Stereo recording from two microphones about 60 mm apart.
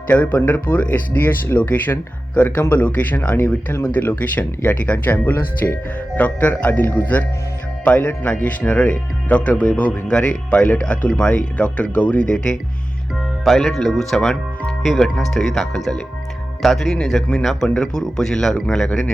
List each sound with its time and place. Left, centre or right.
0.1 s speech: left
13.4 s speech: centre